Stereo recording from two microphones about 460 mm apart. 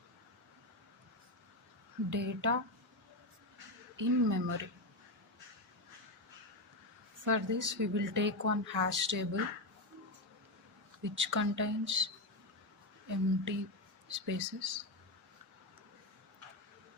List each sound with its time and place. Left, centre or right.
2.0 s a woman's voice: right
3.9 s a woman's voice: right
7.3 s a woman's voice: right
11.2 s a woman's voice: right